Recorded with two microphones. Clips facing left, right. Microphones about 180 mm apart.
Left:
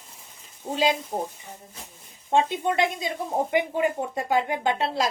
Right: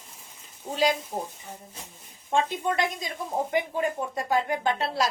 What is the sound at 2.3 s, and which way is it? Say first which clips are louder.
A woman's voice: left 3 dB; 25° left (ahead or behind).